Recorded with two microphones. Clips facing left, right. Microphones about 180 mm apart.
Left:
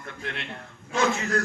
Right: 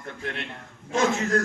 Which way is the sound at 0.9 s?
45° right (ahead or behind).